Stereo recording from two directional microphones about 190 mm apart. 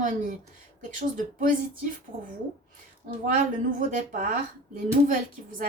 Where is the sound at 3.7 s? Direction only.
45° right (ahead or behind).